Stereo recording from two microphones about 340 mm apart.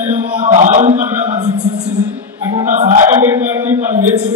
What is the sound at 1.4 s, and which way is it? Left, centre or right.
Music, right.